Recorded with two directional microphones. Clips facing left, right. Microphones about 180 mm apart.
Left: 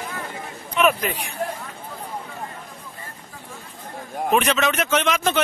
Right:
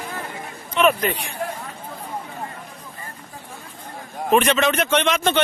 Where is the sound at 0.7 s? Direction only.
5° left (ahead or behind).